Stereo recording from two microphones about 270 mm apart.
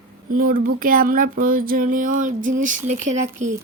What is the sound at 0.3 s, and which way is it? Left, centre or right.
Speech, right.